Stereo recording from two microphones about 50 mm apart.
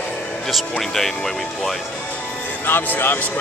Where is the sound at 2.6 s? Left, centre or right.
Left.